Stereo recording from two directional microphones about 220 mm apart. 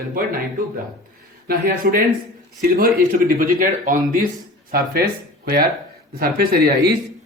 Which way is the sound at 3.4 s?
40° right (ahead or behind).